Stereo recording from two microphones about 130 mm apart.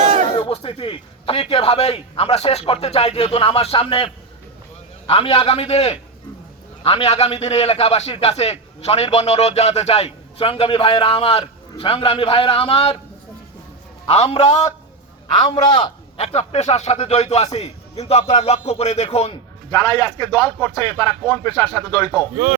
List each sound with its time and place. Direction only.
0.0 s a sound: 55° right (ahead or behind)
0.3 s a man's voice: 45° left (ahead or behind)
14.1 s a man's voice: 50° left (ahead or behind)
19.7 s a man's voice: 30° left (ahead or behind)